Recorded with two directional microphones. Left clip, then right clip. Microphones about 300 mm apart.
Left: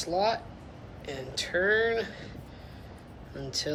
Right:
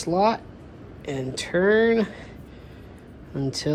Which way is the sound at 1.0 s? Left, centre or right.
Centre.